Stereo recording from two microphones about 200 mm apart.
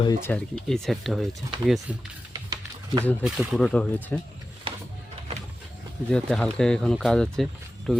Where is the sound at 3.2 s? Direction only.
5° right (ahead or behind).